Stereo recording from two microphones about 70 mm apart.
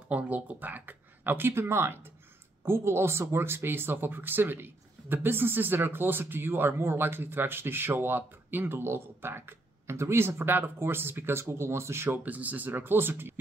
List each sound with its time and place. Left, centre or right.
0.1 s speech: right
12.2 s speech: right